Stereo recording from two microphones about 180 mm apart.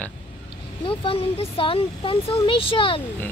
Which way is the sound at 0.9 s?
30° left (ahead or behind).